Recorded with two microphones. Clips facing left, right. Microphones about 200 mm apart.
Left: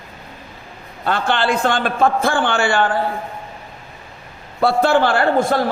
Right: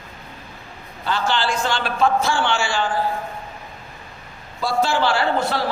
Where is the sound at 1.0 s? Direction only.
55° left (ahead or behind).